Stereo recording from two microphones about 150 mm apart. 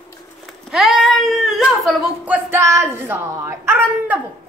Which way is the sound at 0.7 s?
Centre (ahead or behind).